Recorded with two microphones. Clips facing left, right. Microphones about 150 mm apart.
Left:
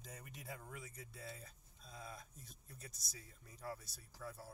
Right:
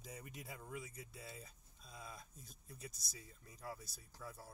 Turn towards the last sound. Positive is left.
turn(degrees=0)  # may be behind; listen again after turning